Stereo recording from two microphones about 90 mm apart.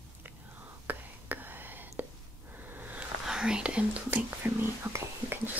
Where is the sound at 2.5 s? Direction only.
20° right (ahead or behind).